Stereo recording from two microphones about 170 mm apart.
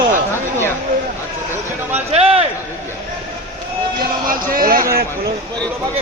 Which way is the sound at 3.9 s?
55° right (ahead or behind).